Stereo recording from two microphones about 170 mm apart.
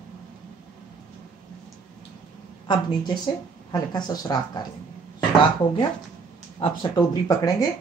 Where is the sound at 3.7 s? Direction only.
20° left (ahead or behind).